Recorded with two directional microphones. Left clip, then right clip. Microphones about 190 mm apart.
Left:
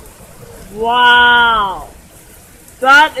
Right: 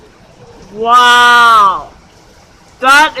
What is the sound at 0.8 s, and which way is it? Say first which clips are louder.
Speech: right 3 dB; 20° right (ahead or behind).